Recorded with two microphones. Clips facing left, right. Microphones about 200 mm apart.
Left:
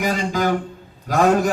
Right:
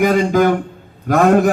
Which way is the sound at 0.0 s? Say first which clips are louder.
Right 8 dB; 55° right (ahead or behind).